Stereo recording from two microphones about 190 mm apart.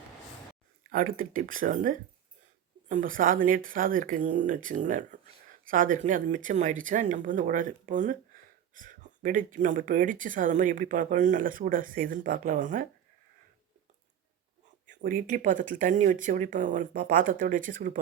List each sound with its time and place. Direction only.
0.9 s speech: 45° right (ahead or behind)
14.8 s speech: 45° right (ahead or behind)